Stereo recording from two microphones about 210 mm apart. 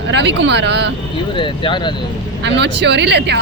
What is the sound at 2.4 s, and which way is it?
Speech, 55° right (ahead or behind).